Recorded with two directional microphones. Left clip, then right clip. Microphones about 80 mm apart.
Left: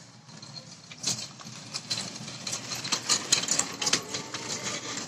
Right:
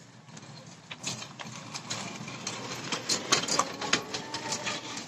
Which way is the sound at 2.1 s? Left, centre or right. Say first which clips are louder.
Left 1 dB; right.